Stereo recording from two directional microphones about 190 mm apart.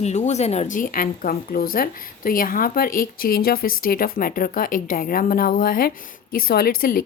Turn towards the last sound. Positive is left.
turn(degrees=50)  # may be behind; listen again after turning